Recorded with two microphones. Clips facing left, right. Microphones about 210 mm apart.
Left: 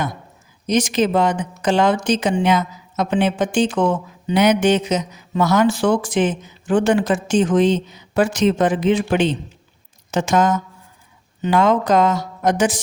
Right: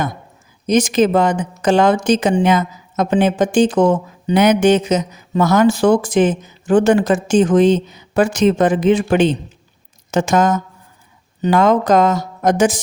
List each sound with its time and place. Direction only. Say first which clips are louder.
0.7 s a woman's voice: right 4 dB; 45° right (ahead or behind)